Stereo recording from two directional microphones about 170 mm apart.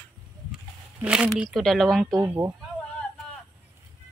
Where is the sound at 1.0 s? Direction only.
5° right (ahead or behind).